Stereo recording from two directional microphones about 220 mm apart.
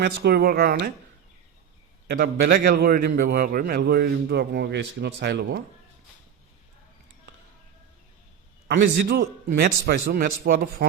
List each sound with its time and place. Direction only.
0.0 s a man's voice: 45° right (ahead or behind)
2.0 s a man's voice: 45° right (ahead or behind)
8.6 s a man's voice: 50° right (ahead or behind)